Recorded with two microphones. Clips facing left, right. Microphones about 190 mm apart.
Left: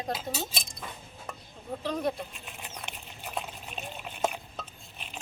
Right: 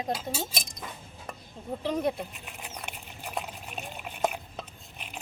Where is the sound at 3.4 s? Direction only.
5° right (ahead or behind).